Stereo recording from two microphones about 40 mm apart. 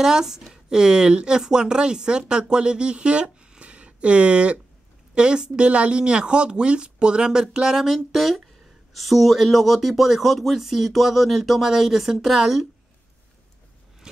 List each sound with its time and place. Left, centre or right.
0.0 s speech: centre